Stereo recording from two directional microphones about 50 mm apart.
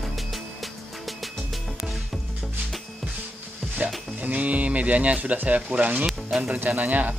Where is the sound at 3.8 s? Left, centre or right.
Right.